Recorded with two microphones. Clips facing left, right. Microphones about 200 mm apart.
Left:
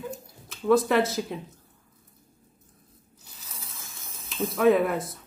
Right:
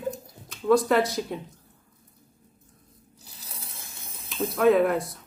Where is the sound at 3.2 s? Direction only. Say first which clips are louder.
Right 1 dB; 35° right (ahead or behind).